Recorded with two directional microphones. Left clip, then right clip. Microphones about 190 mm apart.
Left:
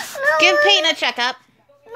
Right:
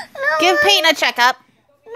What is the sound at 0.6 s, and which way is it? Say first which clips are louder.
Speech: right 2 dB; 35° right (ahead or behind).